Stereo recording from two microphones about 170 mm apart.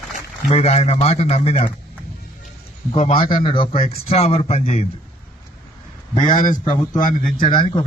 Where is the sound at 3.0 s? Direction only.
30° left (ahead or behind).